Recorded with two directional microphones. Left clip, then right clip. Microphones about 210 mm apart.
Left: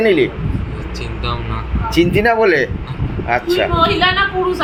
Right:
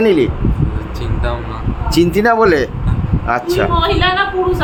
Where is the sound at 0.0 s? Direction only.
30° right (ahead or behind).